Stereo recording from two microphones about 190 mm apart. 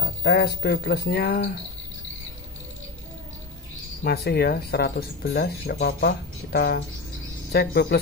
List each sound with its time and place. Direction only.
0.0 s speech: 55° left (ahead or behind)
4.0 s speech: 55° left (ahead or behind)